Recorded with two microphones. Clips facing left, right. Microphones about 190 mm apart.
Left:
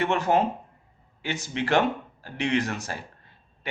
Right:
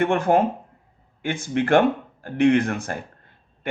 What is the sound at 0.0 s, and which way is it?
Speech, 50° right (ahead or behind).